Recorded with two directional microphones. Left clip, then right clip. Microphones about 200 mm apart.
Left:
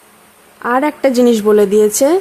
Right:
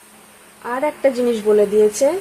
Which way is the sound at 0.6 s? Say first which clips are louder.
Left 5 dB; 40° left (ahead or behind).